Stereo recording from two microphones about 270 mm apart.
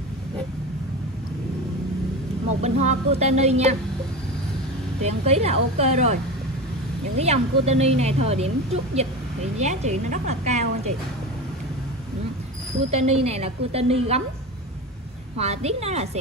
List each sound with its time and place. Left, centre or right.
2.6 s a woman's voice: right
5.0 s a woman's voice: right
7.2 s a woman's voice: right
12.9 s a woman's voice: right
15.3 s a woman's voice: right